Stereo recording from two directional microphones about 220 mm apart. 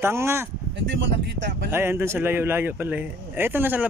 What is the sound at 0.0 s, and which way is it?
Speech, 10° right (ahead or behind).